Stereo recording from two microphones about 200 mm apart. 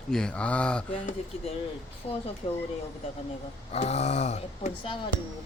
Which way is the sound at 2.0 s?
30° left (ahead or behind).